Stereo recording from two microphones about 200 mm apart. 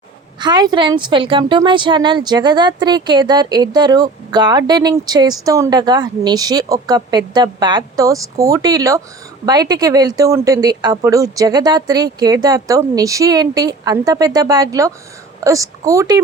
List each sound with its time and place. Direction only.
0.3 s a woman's voice: 20° right (ahead or behind)